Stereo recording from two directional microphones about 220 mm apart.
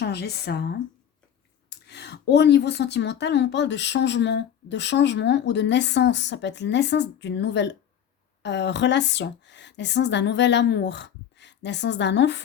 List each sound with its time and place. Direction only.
0.0 s speech: 45° left (ahead or behind)
1.9 s speech: 50° left (ahead or behind)